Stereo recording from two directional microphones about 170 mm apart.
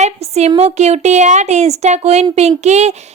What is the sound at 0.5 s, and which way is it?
Speech, 40° right (ahead or behind).